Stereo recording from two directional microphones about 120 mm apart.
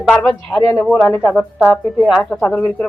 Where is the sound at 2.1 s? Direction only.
5° left (ahead or behind).